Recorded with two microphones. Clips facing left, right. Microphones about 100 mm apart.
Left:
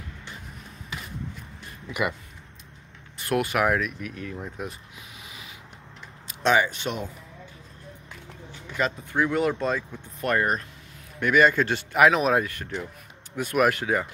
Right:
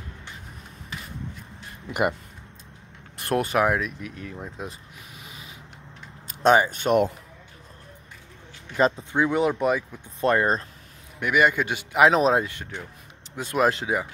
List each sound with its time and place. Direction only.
1.9 s speech: 50° right (ahead or behind)
3.3 s speech: 35° right (ahead or behind)
3.6 s speech: 20° right (ahead or behind)
6.2 s speech: 40° right (ahead or behind)
9.1 s a man's voice: 20° right (ahead or behind)
10.2 s speech: 25° right (ahead or behind)
11.1 s a man's voice: 15° right (ahead or behind)
12.0 s speech: 30° right (ahead or behind)